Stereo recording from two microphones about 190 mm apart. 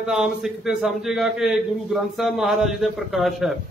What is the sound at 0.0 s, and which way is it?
A man's voice, 5° right (ahead or behind).